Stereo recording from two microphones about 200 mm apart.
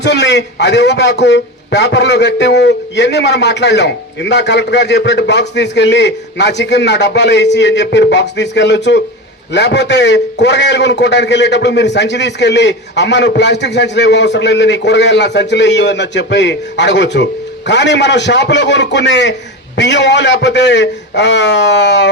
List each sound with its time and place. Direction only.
0.0 s a man's voice: 60° left (ahead or behind)